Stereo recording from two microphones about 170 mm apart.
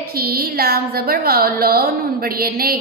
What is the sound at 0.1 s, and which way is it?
A woman's voice, 65° right (ahead or behind).